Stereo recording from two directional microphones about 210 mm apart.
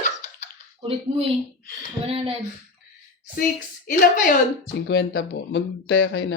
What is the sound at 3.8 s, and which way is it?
Speech, 45° left (ahead or behind).